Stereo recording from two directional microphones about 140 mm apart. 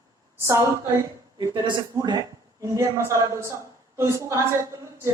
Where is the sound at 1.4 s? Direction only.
30° right (ahead or behind).